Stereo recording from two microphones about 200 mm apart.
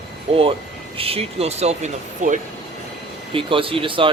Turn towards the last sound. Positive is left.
turn(degrees=-25)  # may be behind; listen again after turning